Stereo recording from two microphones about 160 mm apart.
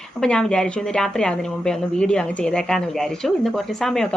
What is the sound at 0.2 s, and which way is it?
Speech, 5° left (ahead or behind).